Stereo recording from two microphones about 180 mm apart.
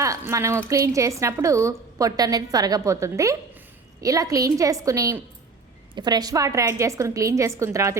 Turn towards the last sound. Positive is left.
turn(degrees=-15)  # may be behind; listen again after turning